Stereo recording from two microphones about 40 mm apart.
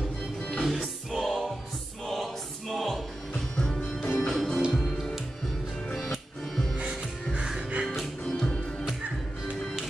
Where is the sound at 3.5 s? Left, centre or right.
Left.